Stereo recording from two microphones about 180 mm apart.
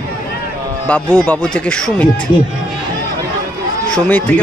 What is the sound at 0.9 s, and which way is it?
Speech, 5° left (ahead or behind).